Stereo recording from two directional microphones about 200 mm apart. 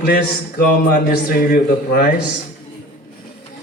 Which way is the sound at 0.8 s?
50° left (ahead or behind).